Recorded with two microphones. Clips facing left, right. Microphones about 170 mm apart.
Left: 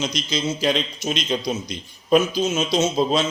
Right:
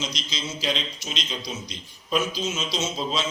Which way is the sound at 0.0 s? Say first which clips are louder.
Left 8 dB; 50° left (ahead or behind).